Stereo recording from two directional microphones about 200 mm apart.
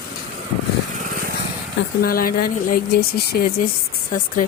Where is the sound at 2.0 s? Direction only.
45° left (ahead or behind).